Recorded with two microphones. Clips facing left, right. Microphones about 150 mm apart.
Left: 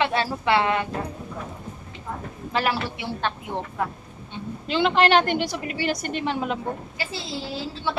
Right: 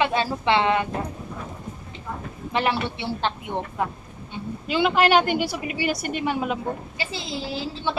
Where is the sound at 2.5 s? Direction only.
25° right (ahead or behind).